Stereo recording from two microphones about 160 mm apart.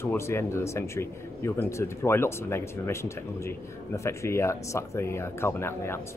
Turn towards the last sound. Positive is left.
turn(degrees=15)  # may be behind; listen again after turning